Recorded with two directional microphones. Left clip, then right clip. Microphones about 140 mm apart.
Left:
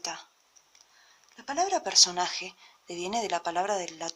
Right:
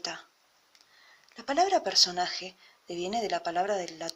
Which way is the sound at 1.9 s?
15° left (ahead or behind).